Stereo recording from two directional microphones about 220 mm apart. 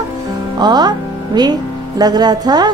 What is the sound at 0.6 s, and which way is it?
Speech, 20° right (ahead or behind).